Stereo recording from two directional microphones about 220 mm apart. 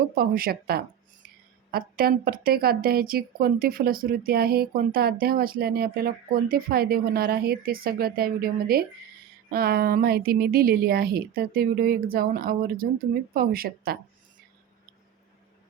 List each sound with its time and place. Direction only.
0.1 s a woman's voice: 40° right (ahead or behind)